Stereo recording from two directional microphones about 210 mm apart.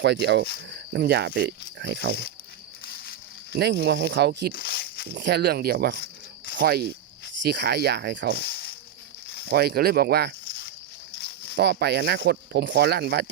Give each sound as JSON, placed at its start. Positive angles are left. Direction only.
{"t": 0.0, "sound": "speech", "side_deg": -55}
{"t": 2.8, "sound": "a sound", "side_deg": 45}
{"t": 3.5, "sound": "speech", "side_deg": -55}
{"t": 4.5, "sound": "snake", "side_deg": 45}
{"t": 5.0, "sound": "speech", "side_deg": -55}
{"t": 8.4, "sound": "snake", "side_deg": 50}
{"t": 9.5, "sound": "speech", "side_deg": -50}
{"t": 11.2, "sound": "a sound", "side_deg": 50}
{"t": 11.5, "sound": "speech", "side_deg": -55}